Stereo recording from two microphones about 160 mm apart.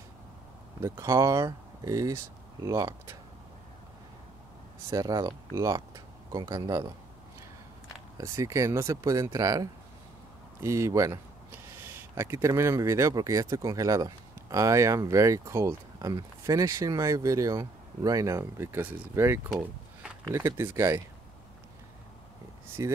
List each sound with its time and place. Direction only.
0.7 s speech: 20° right (ahead or behind)
4.8 s speech: 20° right (ahead or behind)
8.2 s speech: 20° right (ahead or behind)
19.5 s a sound: 5° right (ahead or behind)
20.2 s speech: 15° right (ahead or behind)
22.8 s speech: 20° right (ahead or behind)